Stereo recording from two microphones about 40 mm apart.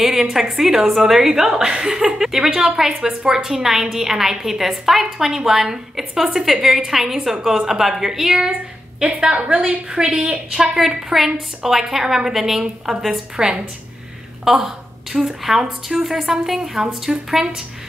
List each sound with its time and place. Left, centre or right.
0.0 s a woman's voice: centre
9.0 s a woman's voice: right; by 13.0 s centre
13.4 s a woman's voice: right
14.4 s a woman's voice: centre